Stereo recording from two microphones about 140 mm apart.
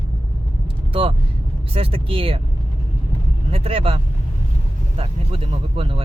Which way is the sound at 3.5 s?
40° right (ahead or behind).